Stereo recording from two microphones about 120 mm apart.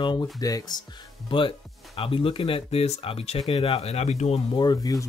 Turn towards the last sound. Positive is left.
turn(degrees=30)  # may be behind; listen again after turning